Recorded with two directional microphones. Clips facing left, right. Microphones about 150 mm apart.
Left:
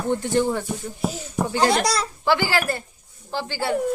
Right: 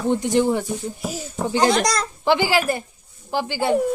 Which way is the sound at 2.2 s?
15° right (ahead or behind).